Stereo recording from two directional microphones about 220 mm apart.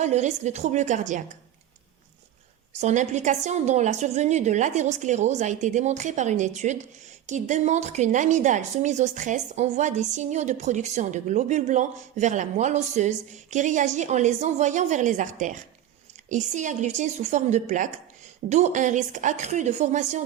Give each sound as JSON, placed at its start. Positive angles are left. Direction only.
{"t": 0.0, "sound": "a woman's voice", "side_deg": -30}
{"t": 2.8, "sound": "a woman's voice", "side_deg": -30}